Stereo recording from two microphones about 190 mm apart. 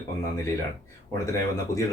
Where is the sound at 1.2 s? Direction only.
15° left (ahead or behind).